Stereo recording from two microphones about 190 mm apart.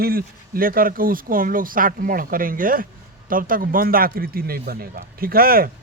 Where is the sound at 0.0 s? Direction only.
50° right (ahead or behind).